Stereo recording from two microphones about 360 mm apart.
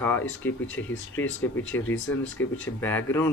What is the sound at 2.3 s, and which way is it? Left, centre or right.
Speech, left.